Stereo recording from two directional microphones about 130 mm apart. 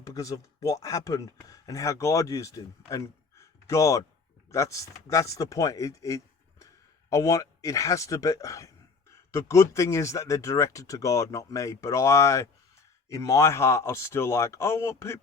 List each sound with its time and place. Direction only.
0.1 s speech: 25° left (ahead or behind)